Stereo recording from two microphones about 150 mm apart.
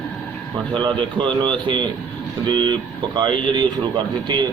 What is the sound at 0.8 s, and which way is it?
A man's voice, 30° right (ahead or behind).